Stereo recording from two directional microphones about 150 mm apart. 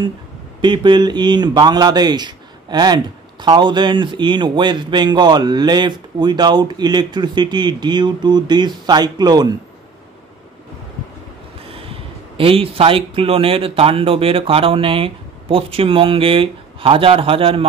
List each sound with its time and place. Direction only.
0.6 s a man's voice: 30° right (ahead or behind)
11.7 s speech: 40° right (ahead or behind)